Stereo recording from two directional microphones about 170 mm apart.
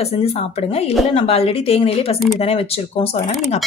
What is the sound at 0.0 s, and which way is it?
Speech, 35° left (ahead or behind).